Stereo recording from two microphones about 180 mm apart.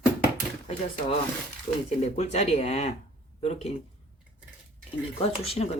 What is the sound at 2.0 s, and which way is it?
A woman's voice, 35° left (ahead or behind).